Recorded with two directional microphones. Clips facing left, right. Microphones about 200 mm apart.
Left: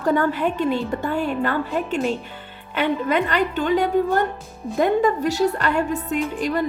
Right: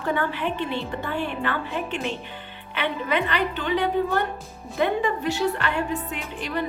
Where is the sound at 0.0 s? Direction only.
40° left (ahead or behind).